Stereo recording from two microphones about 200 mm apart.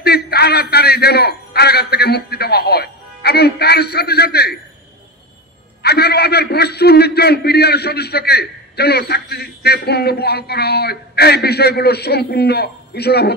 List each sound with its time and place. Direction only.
0.0 s a man's voice: 55° left (ahead or behind)
5.8 s a man's voice: 55° left (ahead or behind)